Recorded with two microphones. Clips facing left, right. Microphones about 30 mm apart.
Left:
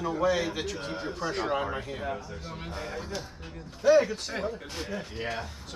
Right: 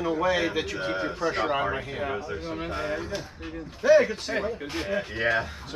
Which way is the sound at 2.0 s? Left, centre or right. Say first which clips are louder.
Right 5 dB; right.